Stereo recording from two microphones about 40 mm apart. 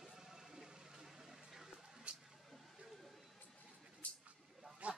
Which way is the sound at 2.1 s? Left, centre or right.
Right.